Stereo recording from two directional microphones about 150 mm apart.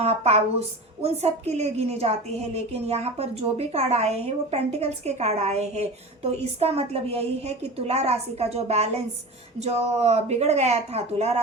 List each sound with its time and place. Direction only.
0.0 s a woman's voice: 45° right (ahead or behind)